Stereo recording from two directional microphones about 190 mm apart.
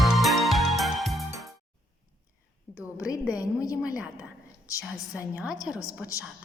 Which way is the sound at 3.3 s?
15° left (ahead or behind).